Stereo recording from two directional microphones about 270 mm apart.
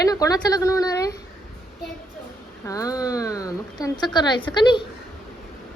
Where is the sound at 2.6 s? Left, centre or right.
Centre.